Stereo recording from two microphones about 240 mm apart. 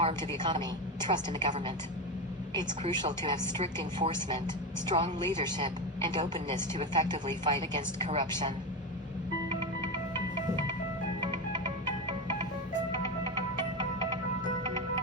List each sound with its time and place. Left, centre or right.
0.0 s a sound: centre
0.4 s a woman's voice: centre
9.5 s music: centre
11.2 s music: centre
13.7 s music: centre